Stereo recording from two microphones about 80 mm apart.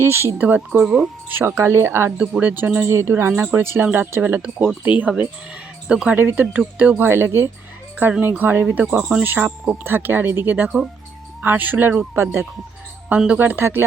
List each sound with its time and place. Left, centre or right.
0.0 s speech: right
0.3 s speech: centre
2.1 s speech: centre
4.4 s speech: centre
9.2 s speech: right
13.1 s a woman's voice: centre
13.4 s speech: right